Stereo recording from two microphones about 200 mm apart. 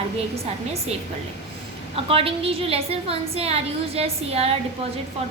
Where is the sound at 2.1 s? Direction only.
30° right (ahead or behind).